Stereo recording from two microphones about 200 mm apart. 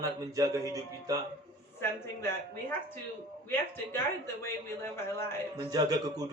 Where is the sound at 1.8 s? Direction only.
10° left (ahead or behind).